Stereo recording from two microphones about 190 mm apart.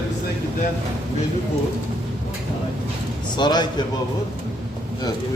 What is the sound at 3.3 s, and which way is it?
Speech, 20° left (ahead or behind).